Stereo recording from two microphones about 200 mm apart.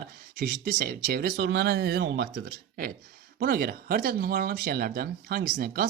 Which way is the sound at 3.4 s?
45° right (ahead or behind).